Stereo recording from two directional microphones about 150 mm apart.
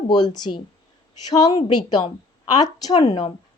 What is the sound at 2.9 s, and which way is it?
Speech, 45° left (ahead or behind).